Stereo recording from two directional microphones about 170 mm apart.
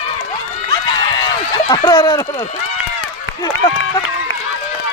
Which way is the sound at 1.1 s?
25° left (ahead or behind).